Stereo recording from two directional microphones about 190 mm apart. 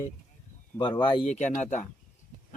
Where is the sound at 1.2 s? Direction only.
35° left (ahead or behind).